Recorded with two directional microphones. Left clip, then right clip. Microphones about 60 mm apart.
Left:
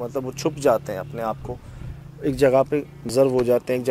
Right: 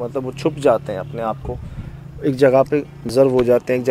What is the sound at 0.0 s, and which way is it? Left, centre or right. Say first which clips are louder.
Speech: right 4 dB; left.